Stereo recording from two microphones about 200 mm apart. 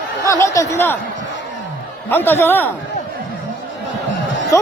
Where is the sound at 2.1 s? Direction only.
10° left (ahead or behind).